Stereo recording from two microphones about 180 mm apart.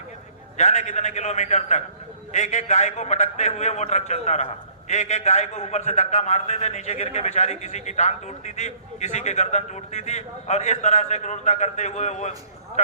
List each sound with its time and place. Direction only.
0.5 s a man's voice: 40° left (ahead or behind)